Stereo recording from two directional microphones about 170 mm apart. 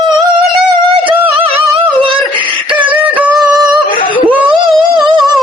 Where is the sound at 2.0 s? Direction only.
30° right (ahead or behind).